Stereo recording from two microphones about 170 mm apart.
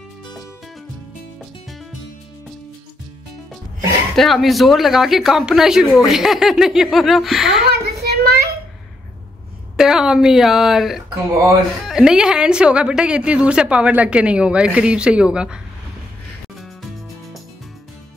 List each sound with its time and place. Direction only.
4.2 s a woman's voice: centre (ahead or behind)
7.6 s a sound: 70° right (ahead or behind)
9.8 s a woman's voice: 5° right (ahead or behind)